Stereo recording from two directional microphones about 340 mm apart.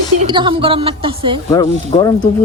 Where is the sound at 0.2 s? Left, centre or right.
Centre.